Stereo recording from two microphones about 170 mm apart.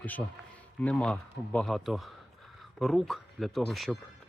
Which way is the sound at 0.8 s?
5° left (ahead or behind).